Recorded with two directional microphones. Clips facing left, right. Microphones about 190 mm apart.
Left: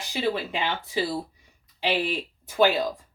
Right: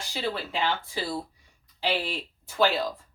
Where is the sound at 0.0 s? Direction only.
15° left (ahead or behind).